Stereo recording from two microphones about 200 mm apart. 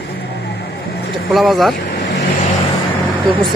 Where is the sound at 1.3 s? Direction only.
Centre (ahead or behind).